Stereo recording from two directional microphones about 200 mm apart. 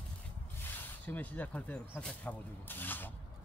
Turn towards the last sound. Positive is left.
turn(degrees=10)  # may be behind; listen again after turning